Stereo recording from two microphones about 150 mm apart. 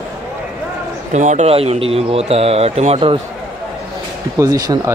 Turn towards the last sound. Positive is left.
turn(degrees=-25)  # may be behind; listen again after turning